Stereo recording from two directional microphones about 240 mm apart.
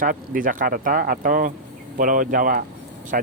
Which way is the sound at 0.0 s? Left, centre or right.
Right.